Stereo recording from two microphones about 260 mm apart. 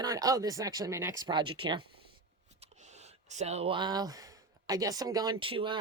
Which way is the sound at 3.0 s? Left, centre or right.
Right.